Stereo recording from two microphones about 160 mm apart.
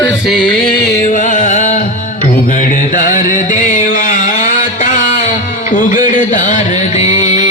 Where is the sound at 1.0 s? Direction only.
55° left (ahead or behind).